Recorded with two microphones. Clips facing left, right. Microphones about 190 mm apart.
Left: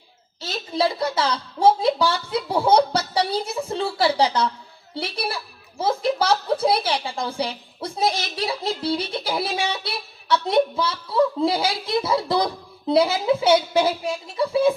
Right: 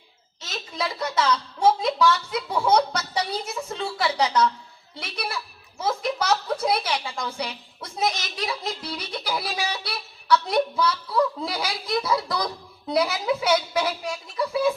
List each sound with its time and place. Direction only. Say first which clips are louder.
0.4 s a woman's voice: left 7 dB; 30° left (ahead or behind)